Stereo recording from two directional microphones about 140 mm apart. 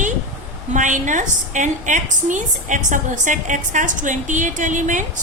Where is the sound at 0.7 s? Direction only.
65° right (ahead or behind).